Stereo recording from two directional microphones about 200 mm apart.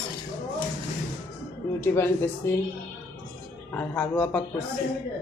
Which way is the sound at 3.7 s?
5° left (ahead or behind).